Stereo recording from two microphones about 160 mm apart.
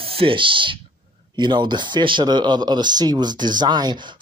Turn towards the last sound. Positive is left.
turn(degrees=-25)  # may be behind; listen again after turning